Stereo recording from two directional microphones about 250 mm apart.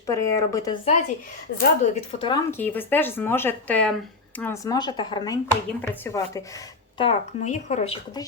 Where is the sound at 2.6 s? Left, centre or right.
Centre.